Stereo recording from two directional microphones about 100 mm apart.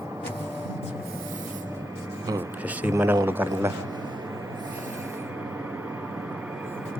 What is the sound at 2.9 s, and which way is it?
Speech, 30° right (ahead or behind).